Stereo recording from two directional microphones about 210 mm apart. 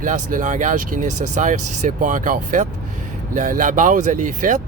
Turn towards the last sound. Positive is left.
turn(degrees=-35)  # may be behind; listen again after turning